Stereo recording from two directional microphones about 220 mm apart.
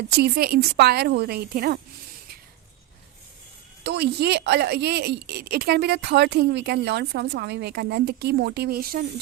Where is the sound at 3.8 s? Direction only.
50° right (ahead or behind).